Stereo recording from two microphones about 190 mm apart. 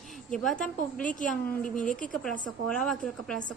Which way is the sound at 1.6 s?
45° left (ahead or behind).